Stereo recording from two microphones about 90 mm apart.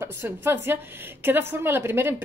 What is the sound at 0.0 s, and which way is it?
A woman's voice, 25° right (ahead or behind).